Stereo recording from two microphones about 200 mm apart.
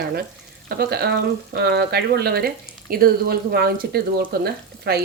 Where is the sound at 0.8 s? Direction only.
50° right (ahead or behind).